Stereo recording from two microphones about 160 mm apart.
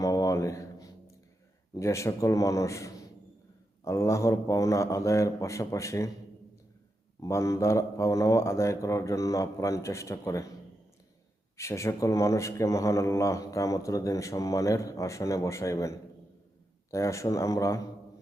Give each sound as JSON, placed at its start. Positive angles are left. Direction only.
{"t": 0.0, "sound": "a sound", "side_deg": 20}
{"t": 1.7, "sound": "speech", "side_deg": 20}
{"t": 7.2, "sound": "speech", "side_deg": 20}
{"t": 11.5, "sound": "speech", "side_deg": 20}